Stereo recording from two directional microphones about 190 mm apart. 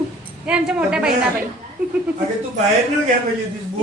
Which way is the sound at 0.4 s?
5° right (ahead or behind).